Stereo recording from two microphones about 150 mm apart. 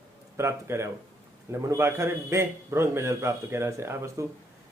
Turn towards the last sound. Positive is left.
turn(degrees=-15)  # may be behind; listen again after turning